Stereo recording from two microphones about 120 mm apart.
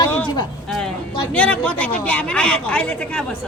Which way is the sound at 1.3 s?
10° left (ahead or behind).